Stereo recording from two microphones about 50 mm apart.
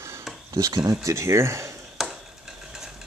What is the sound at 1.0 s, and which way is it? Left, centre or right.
Speech, right.